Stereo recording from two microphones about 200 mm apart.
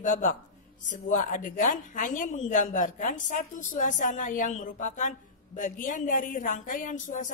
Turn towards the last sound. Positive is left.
turn(degrees=40)  # may be behind; listen again after turning